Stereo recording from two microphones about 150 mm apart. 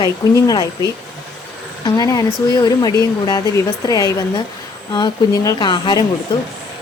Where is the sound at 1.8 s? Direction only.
25° left (ahead or behind).